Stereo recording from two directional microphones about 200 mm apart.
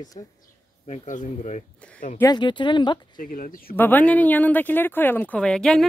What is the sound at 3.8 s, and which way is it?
Speech, 10° left (ahead or behind).